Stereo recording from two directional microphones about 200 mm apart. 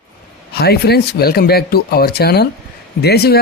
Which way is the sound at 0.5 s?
50° left (ahead or behind).